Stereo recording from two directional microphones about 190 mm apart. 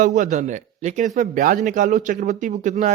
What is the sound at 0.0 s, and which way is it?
A man's voice, 40° right (ahead or behind).